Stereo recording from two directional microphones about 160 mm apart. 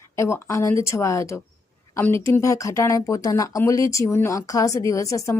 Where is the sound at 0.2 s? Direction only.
15° left (ahead or behind).